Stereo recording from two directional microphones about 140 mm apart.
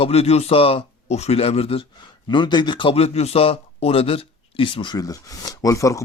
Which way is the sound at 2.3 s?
35° left (ahead or behind).